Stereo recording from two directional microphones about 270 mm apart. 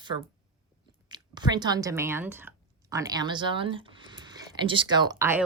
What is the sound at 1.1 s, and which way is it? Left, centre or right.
Speech, centre.